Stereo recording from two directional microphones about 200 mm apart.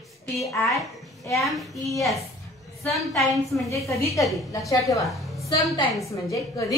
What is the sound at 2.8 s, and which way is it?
Speech, centre (ahead or behind).